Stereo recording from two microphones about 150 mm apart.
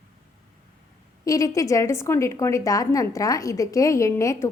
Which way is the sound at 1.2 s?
20° left (ahead or behind).